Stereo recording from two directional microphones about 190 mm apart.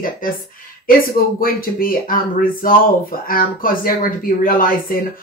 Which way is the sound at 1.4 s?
50° left (ahead or behind).